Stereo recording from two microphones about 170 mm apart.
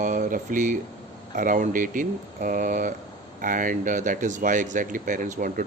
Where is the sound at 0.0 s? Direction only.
50° right (ahead or behind).